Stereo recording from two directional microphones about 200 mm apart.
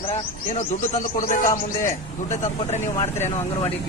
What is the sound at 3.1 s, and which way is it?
Speech, 10° left (ahead or behind).